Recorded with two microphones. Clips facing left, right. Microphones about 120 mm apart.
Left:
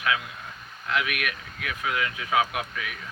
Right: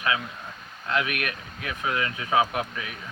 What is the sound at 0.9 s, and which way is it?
Speech, 30° right (ahead or behind).